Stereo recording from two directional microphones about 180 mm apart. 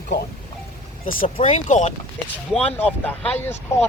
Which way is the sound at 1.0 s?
50° left (ahead or behind).